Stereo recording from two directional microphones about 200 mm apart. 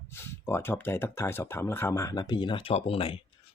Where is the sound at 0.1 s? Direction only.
10° left (ahead or behind).